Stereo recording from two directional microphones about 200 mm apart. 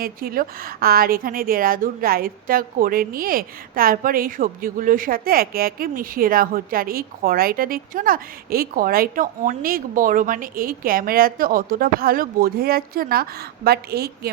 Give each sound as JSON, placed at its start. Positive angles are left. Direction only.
{"t": 0.0, "sound": "a woman's voice", "side_deg": -50}